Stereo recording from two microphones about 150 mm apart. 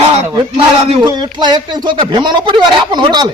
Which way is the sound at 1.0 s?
30° right (ahead or behind).